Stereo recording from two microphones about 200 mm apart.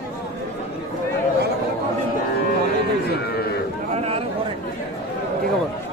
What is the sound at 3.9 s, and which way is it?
Chatter, 30° right (ahead or behind).